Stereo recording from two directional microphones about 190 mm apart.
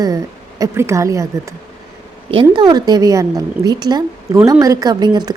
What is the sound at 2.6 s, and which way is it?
A woman's voice, 20° right (ahead or behind).